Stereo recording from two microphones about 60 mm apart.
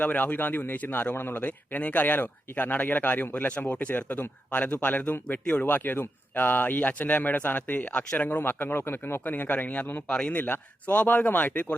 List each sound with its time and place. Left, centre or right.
0.0 s speech: left
8.4 s speech: left
9.2 s speech: left
10.1 s a man's voice: centre
10.3 s speech: left